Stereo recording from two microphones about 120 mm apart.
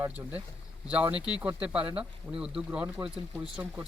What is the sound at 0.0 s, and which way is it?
Speech, 15° right (ahead or behind).